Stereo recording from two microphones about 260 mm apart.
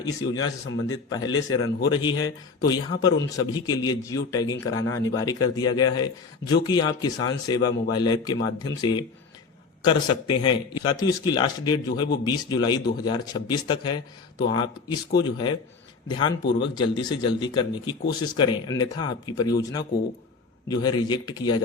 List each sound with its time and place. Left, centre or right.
0.0 s a man's voice: centre
16.4 s speech: left
16.7 s a man's voice: centre